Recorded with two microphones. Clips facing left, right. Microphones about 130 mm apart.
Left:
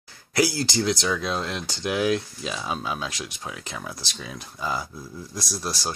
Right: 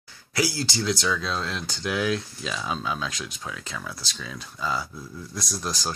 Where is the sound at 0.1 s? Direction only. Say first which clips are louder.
Left 4 dB; 50° left (ahead or behind).